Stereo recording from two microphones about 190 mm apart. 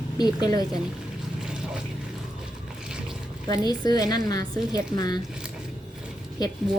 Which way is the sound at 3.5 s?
20° left (ahead or behind).